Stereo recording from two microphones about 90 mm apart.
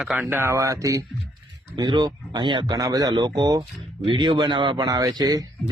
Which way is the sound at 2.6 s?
40° right (ahead or behind).